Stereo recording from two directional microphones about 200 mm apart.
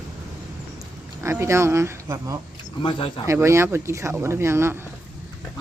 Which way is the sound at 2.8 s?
25° left (ahead or behind).